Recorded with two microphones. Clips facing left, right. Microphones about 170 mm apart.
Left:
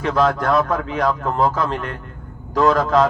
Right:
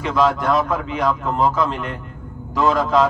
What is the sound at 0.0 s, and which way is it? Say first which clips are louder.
A man's voice: even; 40° left (ahead or behind).